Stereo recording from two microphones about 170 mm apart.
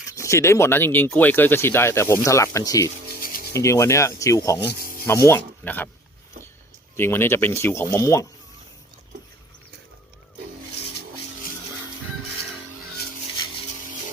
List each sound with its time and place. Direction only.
0.1 s speech: 15° left (ahead or behind)
4.8 s rub: 55° right (ahead or behind)
5.0 s speech: 15° left (ahead or behind)
6.9 s speech: 15° left (ahead or behind)